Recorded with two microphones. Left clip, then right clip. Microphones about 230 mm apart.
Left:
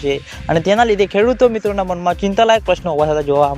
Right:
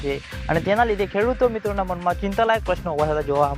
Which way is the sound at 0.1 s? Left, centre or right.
Left.